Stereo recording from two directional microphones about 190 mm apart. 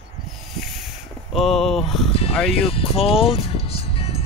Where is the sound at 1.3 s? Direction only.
Centre (ahead or behind).